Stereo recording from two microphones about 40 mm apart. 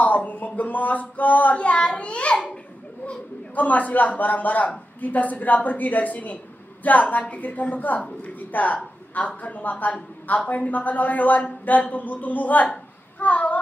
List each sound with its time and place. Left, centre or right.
0.0 s speech: left
1.6 s a child's voice: left
3.5 s a woman's voice: left
13.2 s child singing: left